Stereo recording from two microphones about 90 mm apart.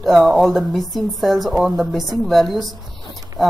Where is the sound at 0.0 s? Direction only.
Centre (ahead or behind).